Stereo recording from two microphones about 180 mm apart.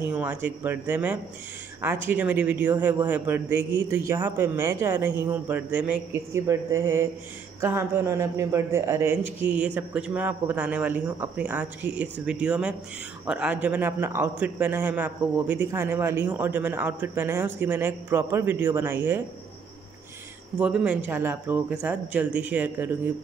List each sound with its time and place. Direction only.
0.0 s a man's voice: 10° right (ahead or behind)
20.5 s a man's voice: 5° right (ahead or behind)